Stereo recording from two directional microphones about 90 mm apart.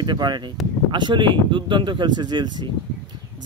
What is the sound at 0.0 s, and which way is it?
Speech, 55° right (ahead or behind).